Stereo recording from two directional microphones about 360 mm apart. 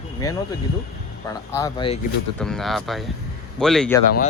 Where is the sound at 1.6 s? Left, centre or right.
Centre.